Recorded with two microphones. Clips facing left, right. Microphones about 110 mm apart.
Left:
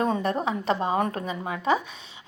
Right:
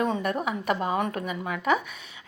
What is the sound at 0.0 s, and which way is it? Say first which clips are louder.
A woman's voice: left 2 dB; 35° left (ahead or behind).